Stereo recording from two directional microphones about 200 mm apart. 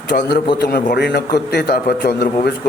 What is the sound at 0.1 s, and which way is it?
Speech, 55° left (ahead or behind).